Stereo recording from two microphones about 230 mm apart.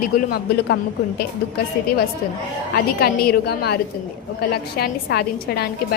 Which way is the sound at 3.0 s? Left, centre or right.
Left.